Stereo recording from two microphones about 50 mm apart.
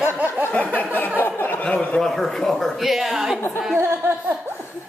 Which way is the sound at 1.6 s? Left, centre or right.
Left.